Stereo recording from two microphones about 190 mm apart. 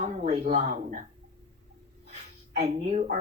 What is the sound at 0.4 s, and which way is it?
Speech, 35° right (ahead or behind).